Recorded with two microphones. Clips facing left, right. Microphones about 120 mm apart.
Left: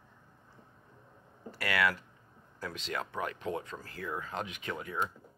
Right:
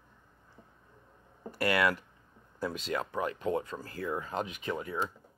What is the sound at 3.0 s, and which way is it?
Speech, 30° right (ahead or behind).